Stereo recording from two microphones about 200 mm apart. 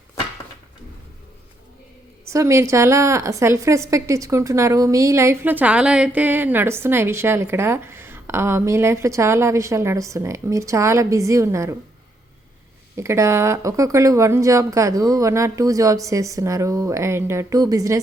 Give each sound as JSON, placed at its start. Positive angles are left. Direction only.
{"t": 2.3, "sound": "a woman's voice", "side_deg": -15}
{"t": 13.0, "sound": "a woman's voice", "side_deg": -15}